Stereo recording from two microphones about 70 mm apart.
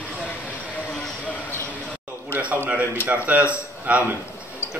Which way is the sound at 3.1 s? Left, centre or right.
Right.